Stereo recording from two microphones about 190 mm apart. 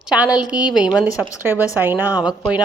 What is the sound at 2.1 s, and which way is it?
Speech, 20° left (ahead or behind).